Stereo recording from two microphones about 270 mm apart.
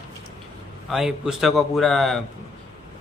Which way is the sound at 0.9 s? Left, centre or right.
Centre.